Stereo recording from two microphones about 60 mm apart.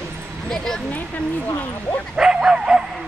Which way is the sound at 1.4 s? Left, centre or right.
Left.